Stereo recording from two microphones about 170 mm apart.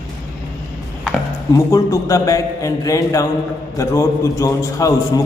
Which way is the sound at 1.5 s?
20° left (ahead or behind).